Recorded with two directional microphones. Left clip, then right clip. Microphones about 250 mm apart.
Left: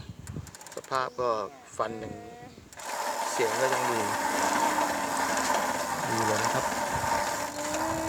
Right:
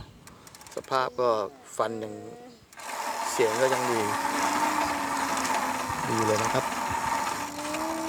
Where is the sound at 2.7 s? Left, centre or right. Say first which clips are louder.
Even; centre.